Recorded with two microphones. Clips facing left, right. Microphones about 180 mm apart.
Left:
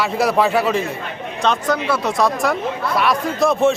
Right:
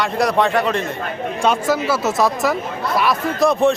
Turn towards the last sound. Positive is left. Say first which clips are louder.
# even
turn(degrees=0)  # may be behind; listen again after turning